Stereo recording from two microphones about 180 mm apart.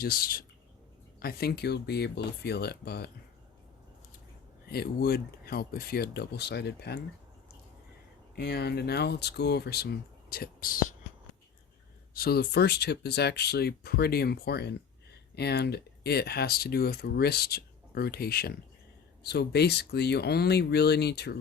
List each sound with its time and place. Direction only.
0.0 s speech: 60° left (ahead or behind)
4.6 s speech: 60° left (ahead or behind)
8.4 s speech: 65° left (ahead or behind)
12.1 s speech: 60° left (ahead or behind)